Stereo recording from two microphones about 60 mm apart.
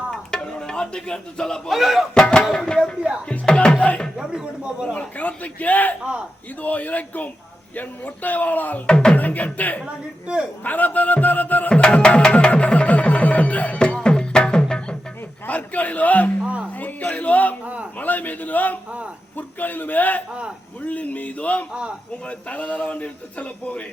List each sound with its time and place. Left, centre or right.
0.1 s a sound: centre
1.7 s speech: centre
2.1 s speech: centre
4.2 s speech: centre
4.9 s a man's voice: left
8.9 s speech: centre
9.1 s a man's voice: left
9.8 s a man's voice: centre
10.6 s a man's voice: left
11.7 s music: centre
15.4 s a man's voice: left
21.7 s speech: centre
22.3 s a man's voice: left